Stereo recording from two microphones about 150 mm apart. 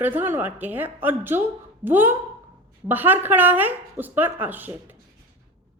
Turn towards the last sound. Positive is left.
turn(degrees=-10)  # may be behind; listen again after turning